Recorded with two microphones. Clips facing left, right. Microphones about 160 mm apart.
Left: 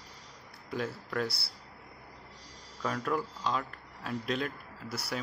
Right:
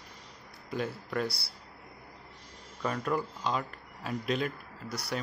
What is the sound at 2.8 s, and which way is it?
Speech, 5° right (ahead or behind).